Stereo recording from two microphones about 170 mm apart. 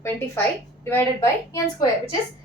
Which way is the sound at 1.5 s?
20° left (ahead or behind).